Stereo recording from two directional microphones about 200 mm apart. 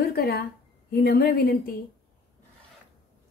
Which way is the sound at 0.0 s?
50° left (ahead or behind).